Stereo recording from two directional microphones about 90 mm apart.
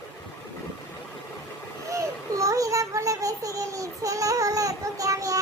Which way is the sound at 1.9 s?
35° right (ahead or behind).